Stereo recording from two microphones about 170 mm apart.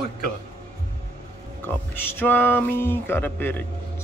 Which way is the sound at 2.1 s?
10° left (ahead or behind).